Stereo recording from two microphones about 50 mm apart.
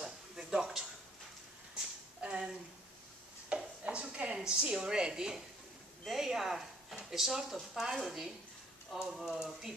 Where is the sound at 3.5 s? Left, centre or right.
Right.